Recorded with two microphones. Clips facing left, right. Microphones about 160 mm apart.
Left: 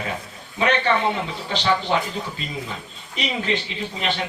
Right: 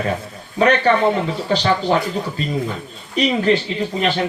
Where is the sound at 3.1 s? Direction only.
45° right (ahead or behind).